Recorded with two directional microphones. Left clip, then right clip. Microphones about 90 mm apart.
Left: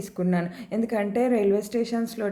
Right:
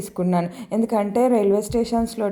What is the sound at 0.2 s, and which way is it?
A woman's voice, 30° right (ahead or behind).